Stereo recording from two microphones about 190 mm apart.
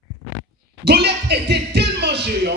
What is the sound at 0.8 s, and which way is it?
Speech, 60° right (ahead or behind).